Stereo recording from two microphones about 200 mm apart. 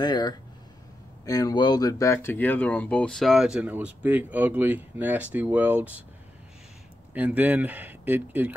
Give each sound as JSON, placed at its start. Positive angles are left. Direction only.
{"t": 0.0, "sound": "speech", "side_deg": 20}
{"t": 7.2, "sound": "speech", "side_deg": -10}